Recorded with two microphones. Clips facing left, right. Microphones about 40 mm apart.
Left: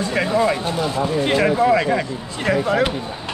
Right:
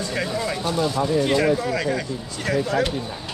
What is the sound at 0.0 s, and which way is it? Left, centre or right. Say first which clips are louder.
Speech: left 7 dB; left.